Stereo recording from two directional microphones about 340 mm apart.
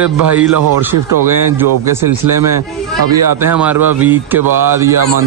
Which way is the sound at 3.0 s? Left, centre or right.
Right.